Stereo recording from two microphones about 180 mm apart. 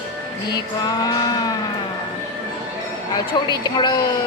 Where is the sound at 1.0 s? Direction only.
20° left (ahead or behind).